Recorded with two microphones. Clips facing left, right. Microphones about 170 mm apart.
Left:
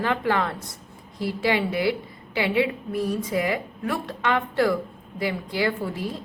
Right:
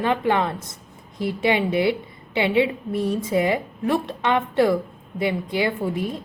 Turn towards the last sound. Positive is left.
turn(degrees=-20)  # may be behind; listen again after turning